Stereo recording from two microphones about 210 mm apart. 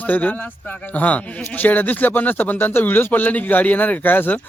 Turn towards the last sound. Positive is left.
turn(degrees=10)  # may be behind; listen again after turning